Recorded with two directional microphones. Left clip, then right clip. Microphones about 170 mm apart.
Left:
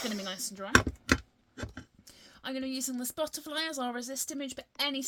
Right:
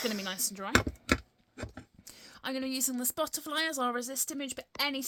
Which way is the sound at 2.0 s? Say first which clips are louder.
Right 2 dB; 50° right (ahead or behind).